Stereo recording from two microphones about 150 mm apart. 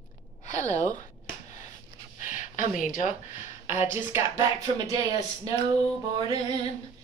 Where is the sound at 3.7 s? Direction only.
15° right (ahead or behind).